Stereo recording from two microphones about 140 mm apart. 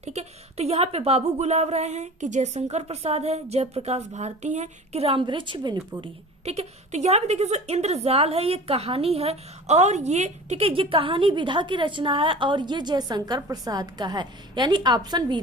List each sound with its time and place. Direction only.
0.0 s speech: 50° right (ahead or behind); by 6.1 s 35° right (ahead or behind)
6.4 s a woman's voice: 50° right (ahead or behind); by 15.4 s 30° right (ahead or behind)